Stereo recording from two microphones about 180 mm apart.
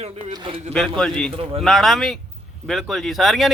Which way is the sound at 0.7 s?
5° left (ahead or behind).